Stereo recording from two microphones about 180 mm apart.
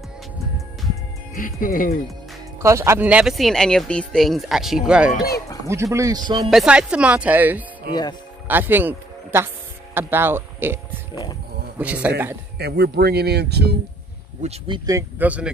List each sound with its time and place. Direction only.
1.3 s speech: 50° left (ahead or behind)
2.6 s speech: 15° right (ahead or behind)
5.7 s speech: 15° right (ahead or behind)
6.5 s speech: 5° right (ahead or behind)
7.9 s speech: 20° left (ahead or behind)
8.5 s speech: 10° right (ahead or behind)
12.5 s speech: 65° right (ahead or behind)
14.4 s speech: 35° right (ahead or behind)
14.9 s speech: 15° right (ahead or behind)